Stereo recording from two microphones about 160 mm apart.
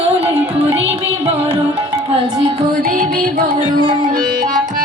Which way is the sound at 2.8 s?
65° right (ahead or behind).